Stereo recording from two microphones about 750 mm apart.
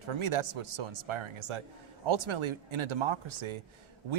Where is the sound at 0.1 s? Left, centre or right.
Right.